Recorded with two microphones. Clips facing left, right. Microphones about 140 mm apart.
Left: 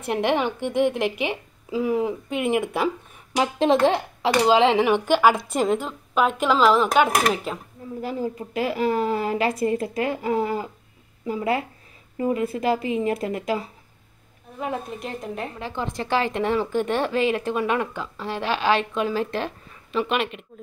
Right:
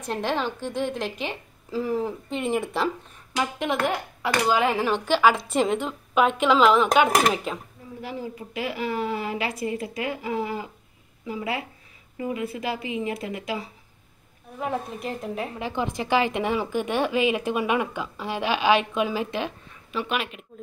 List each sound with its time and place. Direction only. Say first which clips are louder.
0.1 s a woman's voice: left 4 dB; 15° left (ahead or behind)
3.6 s a woman's voice: left 9 dB; 30° left (ahead or behind); by 5.1 s 15° left (ahead or behind)
5.9 s a woman's voice: even; centre (ahead or behind)
8.0 s a woman's voice: left 5 dB; 45° left (ahead or behind)
14.6 s a woman's voice: even; centre (ahead or behind)